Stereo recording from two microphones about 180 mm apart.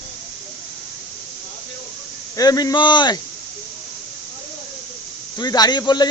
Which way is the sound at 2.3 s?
20° left (ahead or behind).